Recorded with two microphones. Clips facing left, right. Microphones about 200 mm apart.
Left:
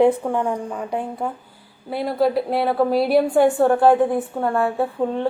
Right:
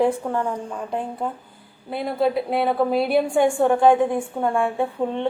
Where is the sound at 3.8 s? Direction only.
5° left (ahead or behind).